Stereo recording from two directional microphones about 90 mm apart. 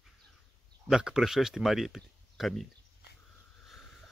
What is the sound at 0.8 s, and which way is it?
Speech, 5° right (ahead or behind).